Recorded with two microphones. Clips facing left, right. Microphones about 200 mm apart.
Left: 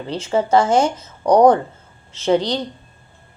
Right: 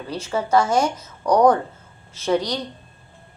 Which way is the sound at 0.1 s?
25° left (ahead or behind).